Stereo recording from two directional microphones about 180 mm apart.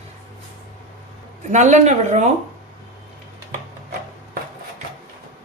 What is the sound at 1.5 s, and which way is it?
Speech, 40° right (ahead or behind).